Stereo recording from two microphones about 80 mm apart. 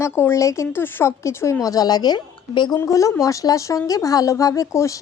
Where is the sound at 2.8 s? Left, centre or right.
Left.